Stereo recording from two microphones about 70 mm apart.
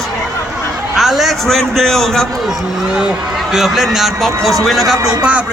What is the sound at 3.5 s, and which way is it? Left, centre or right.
A man's voice, centre.